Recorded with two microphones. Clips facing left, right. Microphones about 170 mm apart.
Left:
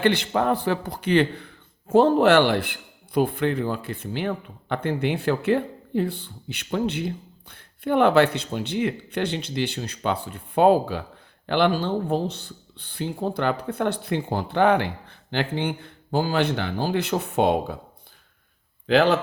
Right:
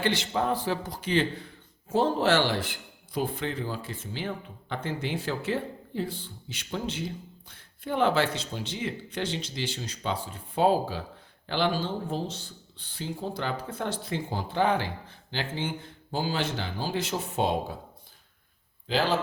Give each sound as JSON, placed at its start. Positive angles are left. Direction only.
{"t": 0.0, "sound": "speech", "side_deg": 60}
{"t": 18.9, "sound": "speech", "side_deg": 65}